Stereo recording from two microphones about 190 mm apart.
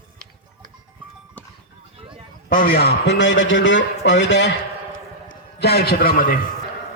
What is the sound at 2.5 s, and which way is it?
A man's voice, 50° left (ahead or behind).